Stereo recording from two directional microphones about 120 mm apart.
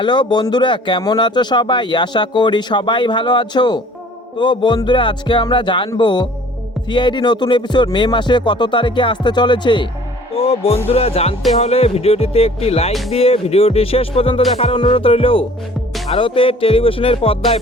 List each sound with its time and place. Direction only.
0.0 s speech: 40° left (ahead or behind)
4.9 s music: 40° left (ahead or behind)
6.0 s speech: 40° left (ahead or behind)
10.3 s speech: 55° left (ahead or behind)
14.8 s music: 50° left (ahead or behind)